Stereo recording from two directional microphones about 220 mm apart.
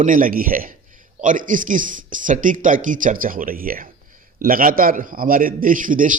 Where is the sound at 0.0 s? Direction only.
40° right (ahead or behind).